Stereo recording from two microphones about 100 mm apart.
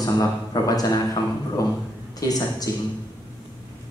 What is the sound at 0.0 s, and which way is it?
A man's voice, 40° left (ahead or behind).